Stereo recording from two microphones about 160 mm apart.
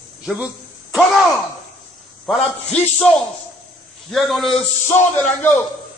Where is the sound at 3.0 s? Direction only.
Centre (ahead or behind).